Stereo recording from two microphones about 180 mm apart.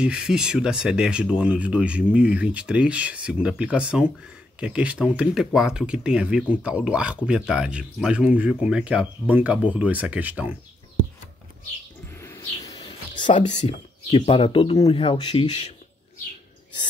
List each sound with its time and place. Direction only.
0.0 s speech: 5° right (ahead or behind)
12.1 s a sound: 15° left (ahead or behind)
13.5 s speech: 35° left (ahead or behind)